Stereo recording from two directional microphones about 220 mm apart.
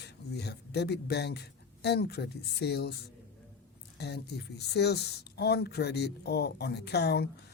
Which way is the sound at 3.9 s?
50° left (ahead or behind).